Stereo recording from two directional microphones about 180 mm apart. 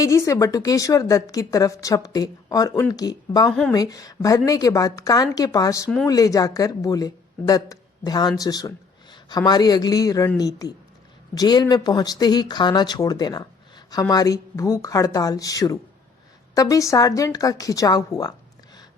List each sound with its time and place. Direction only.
0.0 s a man's voice: 20° left (ahead or behind)